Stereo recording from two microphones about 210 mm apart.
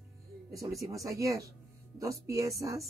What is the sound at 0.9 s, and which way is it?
Speech, 15° right (ahead or behind).